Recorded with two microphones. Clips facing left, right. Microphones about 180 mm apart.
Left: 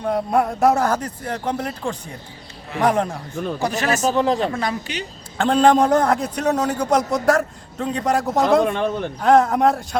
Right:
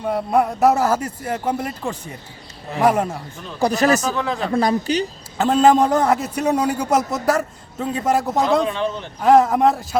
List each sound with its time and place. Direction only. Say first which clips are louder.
0.0 s a man's voice: right 1 dB; 5° right (ahead or behind)
3.6 s speech: right 7 dB; 35° right (ahead or behind)
4.1 s speech: left 5 dB; 40° left (ahead or behind)
4.5 s speech: right 7 dB; 35° right (ahead or behind)
5.4 s a man's voice: right 1 dB; 5° right (ahead or behind)
8.6 s a man's voice: left 2 dB; 55° left (ahead or behind)
9.2 s a man's voice: right 1 dB; 5° right (ahead or behind)